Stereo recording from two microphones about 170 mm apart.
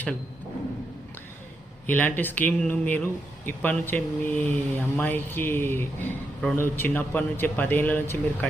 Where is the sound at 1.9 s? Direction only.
10° left (ahead or behind).